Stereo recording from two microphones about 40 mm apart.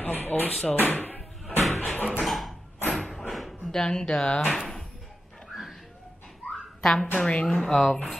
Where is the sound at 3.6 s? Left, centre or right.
Centre.